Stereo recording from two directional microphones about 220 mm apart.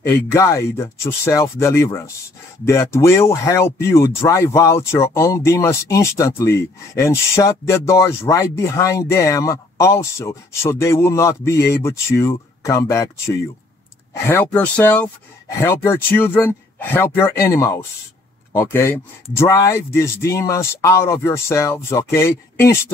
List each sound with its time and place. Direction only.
0.0 s speech: 15° left (ahead or behind)
14.1 s speech: 10° left (ahead or behind)